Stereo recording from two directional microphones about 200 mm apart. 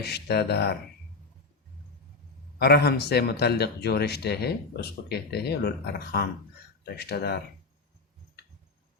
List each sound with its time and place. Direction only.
0.0 s a man's voice: 55° left (ahead or behind)
2.6 s a man's voice: 55° left (ahead or behind)